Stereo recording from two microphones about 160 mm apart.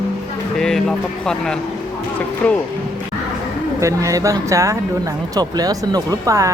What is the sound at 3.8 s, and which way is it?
Speech, 20° right (ahead or behind).